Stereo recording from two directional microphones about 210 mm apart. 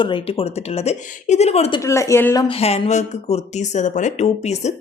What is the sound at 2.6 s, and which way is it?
Speech, 30° left (ahead or behind).